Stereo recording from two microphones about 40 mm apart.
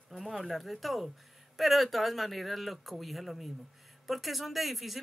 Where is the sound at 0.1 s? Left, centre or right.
Centre.